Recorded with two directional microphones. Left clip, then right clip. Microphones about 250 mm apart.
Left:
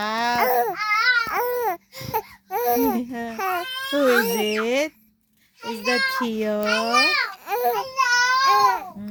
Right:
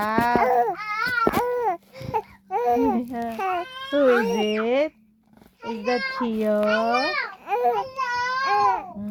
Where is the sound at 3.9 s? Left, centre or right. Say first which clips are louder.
Even; left.